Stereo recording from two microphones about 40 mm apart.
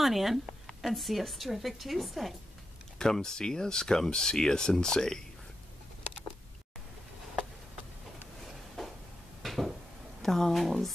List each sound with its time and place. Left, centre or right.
0.0 s speech: centre
3.0 s speech: centre
9.4 s a sound: centre
10.2 s speech: centre